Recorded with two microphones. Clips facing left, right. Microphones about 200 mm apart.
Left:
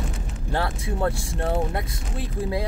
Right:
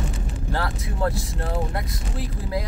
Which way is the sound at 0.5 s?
25° left (ahead or behind).